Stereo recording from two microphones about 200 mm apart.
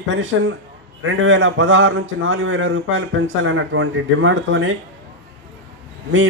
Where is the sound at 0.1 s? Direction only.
70° right (ahead or behind).